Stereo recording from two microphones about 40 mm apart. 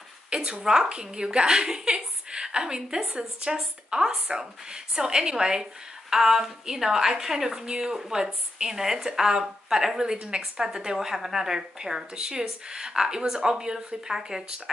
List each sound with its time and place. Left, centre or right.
0.3 s a woman's voice: right